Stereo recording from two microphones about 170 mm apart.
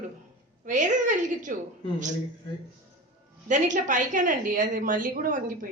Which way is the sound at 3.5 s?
50° right (ahead or behind).